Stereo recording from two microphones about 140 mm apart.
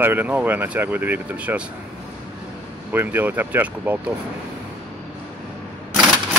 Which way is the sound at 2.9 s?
15° right (ahead or behind).